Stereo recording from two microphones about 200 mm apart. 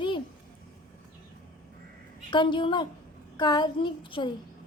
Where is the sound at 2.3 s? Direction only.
25° left (ahead or behind).